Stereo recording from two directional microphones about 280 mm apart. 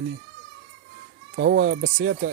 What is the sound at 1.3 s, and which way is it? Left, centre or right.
Speech, right.